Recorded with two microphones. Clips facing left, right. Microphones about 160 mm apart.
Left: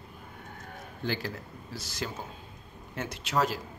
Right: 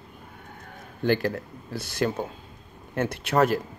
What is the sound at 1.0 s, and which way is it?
Speech, 55° right (ahead or behind).